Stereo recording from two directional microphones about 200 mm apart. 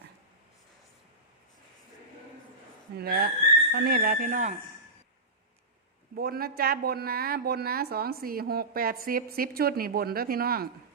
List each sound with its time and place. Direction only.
3.0 s speech: 50° right (ahead or behind)
6.1 s speech: 50° right (ahead or behind)